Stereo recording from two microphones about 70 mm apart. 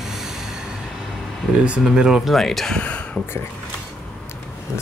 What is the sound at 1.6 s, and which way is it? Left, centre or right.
Speech, centre.